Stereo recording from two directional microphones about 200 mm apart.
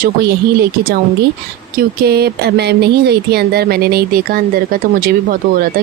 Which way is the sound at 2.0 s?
50° right (ahead or behind).